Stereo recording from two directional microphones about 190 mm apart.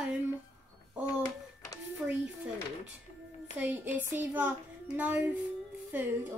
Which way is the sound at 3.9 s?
10° right (ahead or behind).